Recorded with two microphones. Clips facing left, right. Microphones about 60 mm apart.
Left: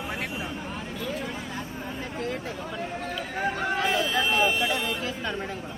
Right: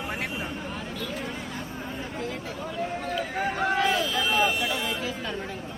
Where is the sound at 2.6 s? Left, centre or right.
Centre.